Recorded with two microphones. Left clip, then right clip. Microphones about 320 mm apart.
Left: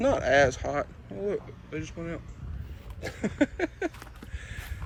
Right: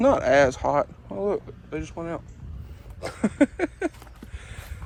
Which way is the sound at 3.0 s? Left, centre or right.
Centre.